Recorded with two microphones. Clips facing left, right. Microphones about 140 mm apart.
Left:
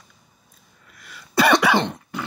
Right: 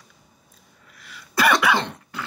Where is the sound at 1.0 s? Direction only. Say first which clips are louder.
Left 1 dB; 45° left (ahead or behind).